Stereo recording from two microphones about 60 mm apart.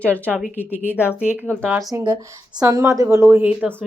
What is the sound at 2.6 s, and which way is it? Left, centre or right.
Speech, right.